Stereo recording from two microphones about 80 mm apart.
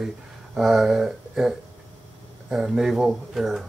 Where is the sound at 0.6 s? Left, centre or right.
Centre.